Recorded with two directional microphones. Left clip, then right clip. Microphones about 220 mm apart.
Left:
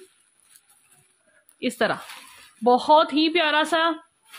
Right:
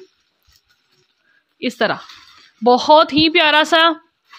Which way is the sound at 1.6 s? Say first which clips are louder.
Right 5 dB; 25° right (ahead or behind).